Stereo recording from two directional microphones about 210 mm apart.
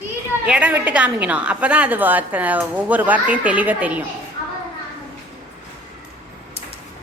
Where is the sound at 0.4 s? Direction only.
5° right (ahead or behind).